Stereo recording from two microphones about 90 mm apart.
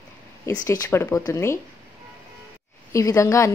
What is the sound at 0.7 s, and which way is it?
Speech, 30° left (ahead or behind).